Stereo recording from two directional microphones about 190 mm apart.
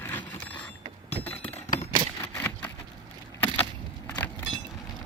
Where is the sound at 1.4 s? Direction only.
35° left (ahead or behind).